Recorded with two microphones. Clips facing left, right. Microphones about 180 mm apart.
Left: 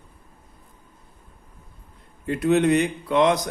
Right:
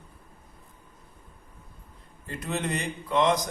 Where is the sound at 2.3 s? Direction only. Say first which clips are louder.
Left 12 dB; 65° left (ahead or behind).